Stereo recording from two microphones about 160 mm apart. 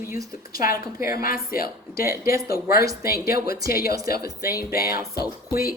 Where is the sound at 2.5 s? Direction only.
70° left (ahead or behind).